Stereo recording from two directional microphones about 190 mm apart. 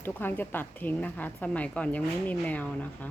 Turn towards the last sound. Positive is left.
turn(degrees=10)  # may be behind; listen again after turning